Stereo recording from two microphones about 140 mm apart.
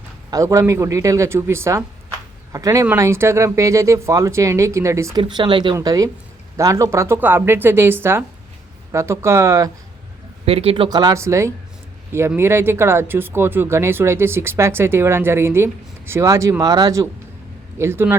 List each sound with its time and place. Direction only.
0.3 s speech: 25° right (ahead or behind)
5.3 s speech: 35° right (ahead or behind)
5.7 s speech: 25° right (ahead or behind)
10.4 s speech: 45° right (ahead or behind)
10.8 s speech: 30° right (ahead or behind)